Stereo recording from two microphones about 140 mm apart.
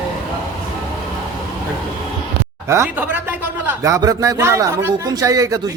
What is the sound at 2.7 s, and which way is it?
Speech, 15° right (ahead or behind).